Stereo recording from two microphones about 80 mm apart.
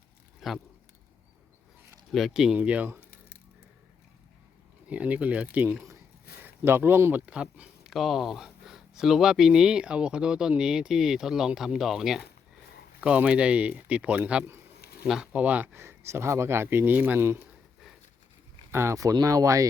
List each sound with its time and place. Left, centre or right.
0.3 s a sound: centre
2.1 s speech: centre
2.6 s speech: centre
4.9 s speech: centre
6.6 s speech: right
7.9 s speech: centre
13.0 s speech: centre
15.7 s speech: right
17.2 s speech: right
18.7 s speech: right
19.2 s speech: right